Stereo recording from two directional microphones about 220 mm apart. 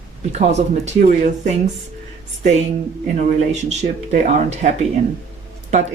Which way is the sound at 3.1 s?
30° right (ahead or behind).